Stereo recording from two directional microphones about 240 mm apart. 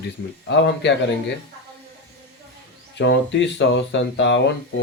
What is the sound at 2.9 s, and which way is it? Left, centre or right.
Speech, left.